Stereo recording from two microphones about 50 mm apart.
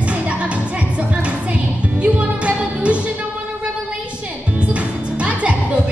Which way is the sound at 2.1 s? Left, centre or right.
Right.